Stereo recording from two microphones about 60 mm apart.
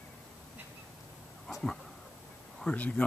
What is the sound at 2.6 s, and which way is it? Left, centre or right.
Speech, left.